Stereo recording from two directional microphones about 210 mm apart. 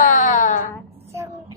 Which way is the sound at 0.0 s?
35° left (ahead or behind).